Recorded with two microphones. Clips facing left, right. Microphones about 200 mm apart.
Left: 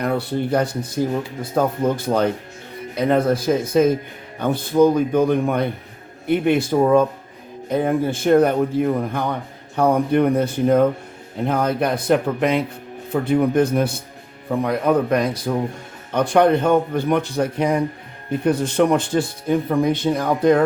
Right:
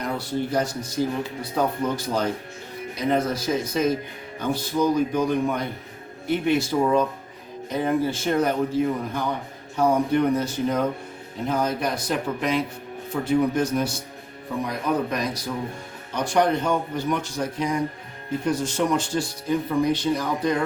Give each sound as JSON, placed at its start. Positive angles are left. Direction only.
{"t": 0.0, "sound": "speech", "side_deg": 60}